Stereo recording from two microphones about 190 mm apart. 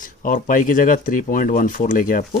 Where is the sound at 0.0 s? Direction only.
45° left (ahead or behind).